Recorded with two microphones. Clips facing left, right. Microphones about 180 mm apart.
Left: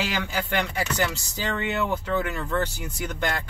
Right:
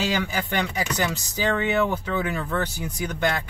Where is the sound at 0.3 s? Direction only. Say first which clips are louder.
Right 1 dB; 15° right (ahead or behind).